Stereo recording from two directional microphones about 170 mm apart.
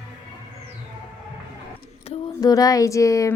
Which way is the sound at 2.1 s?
35° left (ahead or behind).